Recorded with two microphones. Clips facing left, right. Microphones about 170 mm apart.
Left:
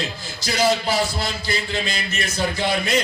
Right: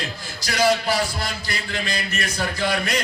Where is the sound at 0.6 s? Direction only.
25° left (ahead or behind).